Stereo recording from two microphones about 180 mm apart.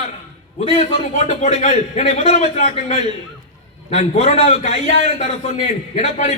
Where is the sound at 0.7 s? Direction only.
40° left (ahead or behind).